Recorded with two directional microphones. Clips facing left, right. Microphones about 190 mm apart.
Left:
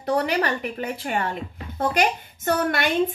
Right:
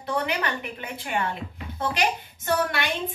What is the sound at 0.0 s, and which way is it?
A woman's voice, 40° left (ahead or behind).